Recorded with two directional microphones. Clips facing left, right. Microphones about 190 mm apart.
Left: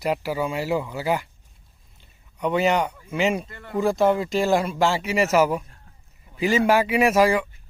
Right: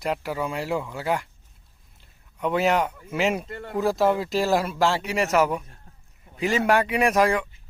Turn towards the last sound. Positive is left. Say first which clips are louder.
# left 2 dB
turn(degrees=0)  # may be behind; listen again after turning